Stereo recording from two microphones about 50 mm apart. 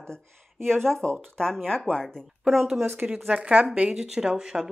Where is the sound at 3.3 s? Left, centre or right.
Right.